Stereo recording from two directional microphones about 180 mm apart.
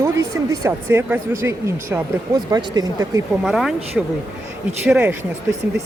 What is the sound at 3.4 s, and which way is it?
Speech, centre (ahead or behind).